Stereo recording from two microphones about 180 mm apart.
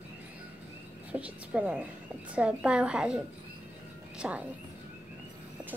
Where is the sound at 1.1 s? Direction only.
10° right (ahead or behind).